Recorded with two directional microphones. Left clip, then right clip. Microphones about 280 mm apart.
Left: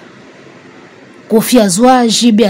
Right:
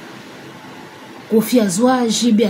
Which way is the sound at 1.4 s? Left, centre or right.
Left.